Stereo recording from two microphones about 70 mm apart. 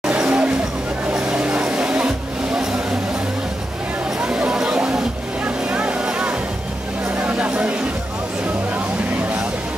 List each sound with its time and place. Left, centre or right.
0.0 s vehicle: centre
1.1 s music: centre
4.2 s vehicle: centre
7.2 s chatter: centre